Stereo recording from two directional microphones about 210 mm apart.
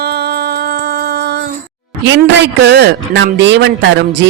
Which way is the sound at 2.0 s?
55° right (ahead or behind).